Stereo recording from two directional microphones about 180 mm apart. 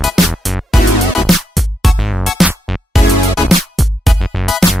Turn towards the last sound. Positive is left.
turn(degrees=0)  # may be behind; listen again after turning